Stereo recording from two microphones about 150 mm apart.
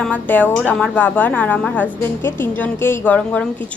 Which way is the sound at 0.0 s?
10° left (ahead or behind).